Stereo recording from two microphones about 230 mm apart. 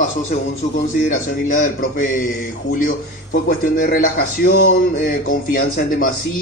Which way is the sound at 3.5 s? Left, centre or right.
Left.